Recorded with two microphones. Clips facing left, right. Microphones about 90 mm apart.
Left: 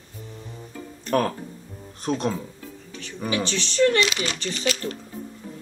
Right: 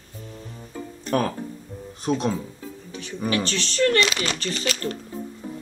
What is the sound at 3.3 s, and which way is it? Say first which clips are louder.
Speech: even; 15° left (ahead or behind).